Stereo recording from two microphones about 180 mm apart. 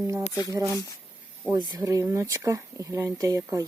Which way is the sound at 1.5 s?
25° right (ahead or behind).